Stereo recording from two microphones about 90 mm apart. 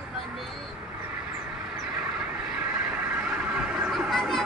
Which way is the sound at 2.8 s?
10° right (ahead or behind).